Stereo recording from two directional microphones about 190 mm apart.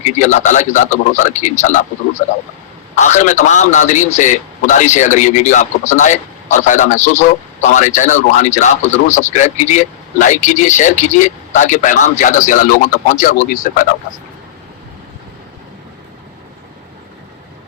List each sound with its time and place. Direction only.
0.2 s speech: 40° left (ahead or behind)
3.0 s speech: 40° left (ahead or behind)